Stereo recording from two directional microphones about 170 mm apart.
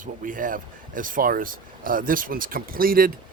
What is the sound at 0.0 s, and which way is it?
Speech, 50° right (ahead or behind).